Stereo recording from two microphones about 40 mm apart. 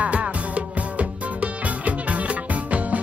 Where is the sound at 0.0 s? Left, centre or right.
Right.